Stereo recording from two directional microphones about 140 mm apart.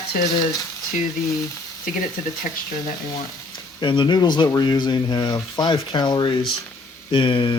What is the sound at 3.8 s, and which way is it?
Speech, 35° left (ahead or behind).